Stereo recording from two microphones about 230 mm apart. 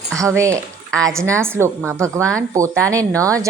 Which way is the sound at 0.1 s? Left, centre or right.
Centre.